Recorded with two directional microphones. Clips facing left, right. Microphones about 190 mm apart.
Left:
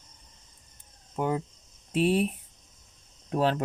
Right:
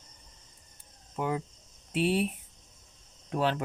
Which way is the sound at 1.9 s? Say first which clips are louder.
Left 3 dB; 40° left (ahead or behind).